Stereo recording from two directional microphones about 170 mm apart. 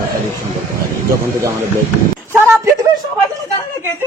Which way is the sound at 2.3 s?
15° right (ahead or behind).